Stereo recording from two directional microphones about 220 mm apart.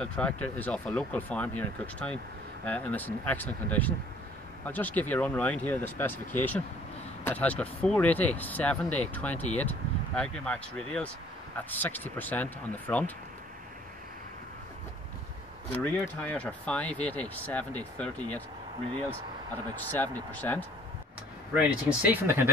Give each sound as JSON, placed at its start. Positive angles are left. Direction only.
{"t": 0.0, "sound": "speech", "side_deg": 5}
{"t": 15.7, "sound": "speech", "side_deg": 5}
{"t": 19.7, "sound": "speech", "side_deg": 10}
{"t": 21.5, "sound": "speech", "side_deg": -10}